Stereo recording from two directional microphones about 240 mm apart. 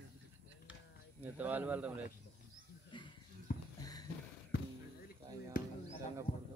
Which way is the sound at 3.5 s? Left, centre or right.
Left.